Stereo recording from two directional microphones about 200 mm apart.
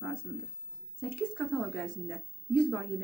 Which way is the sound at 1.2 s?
5° left (ahead or behind).